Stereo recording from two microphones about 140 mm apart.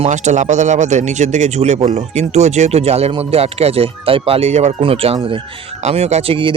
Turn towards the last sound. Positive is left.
turn(degrees=-40)  # may be behind; listen again after turning